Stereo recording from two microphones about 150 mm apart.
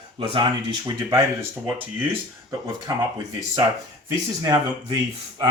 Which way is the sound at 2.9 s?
25° right (ahead or behind).